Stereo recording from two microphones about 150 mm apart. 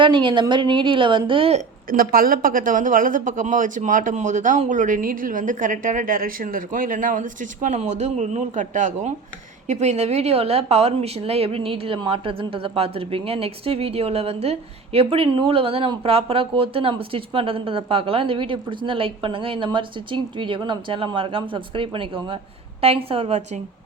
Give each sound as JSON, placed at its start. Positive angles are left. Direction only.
{"t": 0.0, "sound": "a woman's voice", "side_deg": -35}
{"t": 1.9, "sound": "a woman's voice", "side_deg": -75}